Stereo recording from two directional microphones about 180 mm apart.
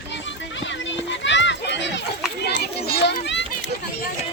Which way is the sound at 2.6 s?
65° left (ahead or behind).